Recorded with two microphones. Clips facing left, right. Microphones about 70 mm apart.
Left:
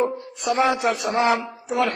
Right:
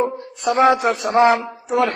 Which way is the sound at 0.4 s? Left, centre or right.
Right.